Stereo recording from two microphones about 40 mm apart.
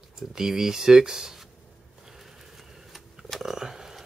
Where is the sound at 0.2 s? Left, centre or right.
Centre.